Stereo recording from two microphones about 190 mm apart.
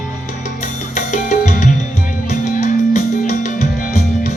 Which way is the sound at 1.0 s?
40° left (ahead or behind).